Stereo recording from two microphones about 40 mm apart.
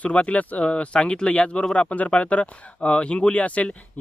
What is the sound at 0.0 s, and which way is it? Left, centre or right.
Speech, left.